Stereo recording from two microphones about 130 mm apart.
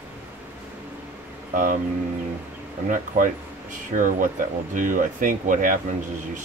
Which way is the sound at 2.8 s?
90° right.